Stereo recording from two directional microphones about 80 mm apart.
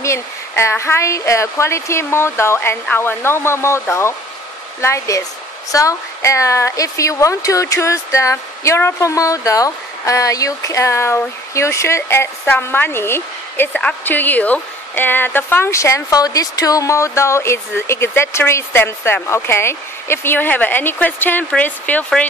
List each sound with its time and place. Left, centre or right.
0.0 s a woman's voice: left
4.8 s a woman's voice: left
13.7 s speech: centre
15.7 s a woman's voice: left